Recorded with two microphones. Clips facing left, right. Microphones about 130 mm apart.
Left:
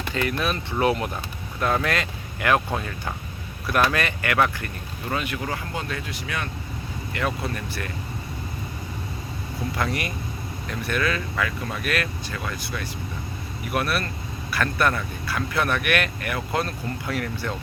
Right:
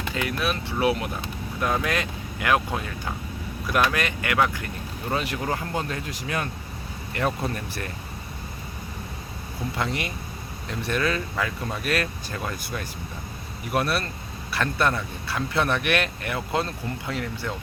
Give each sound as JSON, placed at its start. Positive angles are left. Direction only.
{"t": 0.1, "sound": "speech", "side_deg": -5}
{"t": 3.7, "sound": "speech", "side_deg": -15}
{"t": 5.1, "sound": "speech", "side_deg": -35}
{"t": 9.7, "sound": "speech", "side_deg": -20}
{"t": 10.7, "sound": "speech", "side_deg": -30}
{"t": 13.7, "sound": "speech", "side_deg": -30}